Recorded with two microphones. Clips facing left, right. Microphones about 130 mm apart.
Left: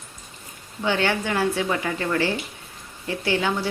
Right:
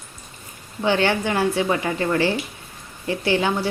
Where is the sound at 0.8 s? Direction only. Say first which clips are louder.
Right 3 dB; 30° right (ahead or behind).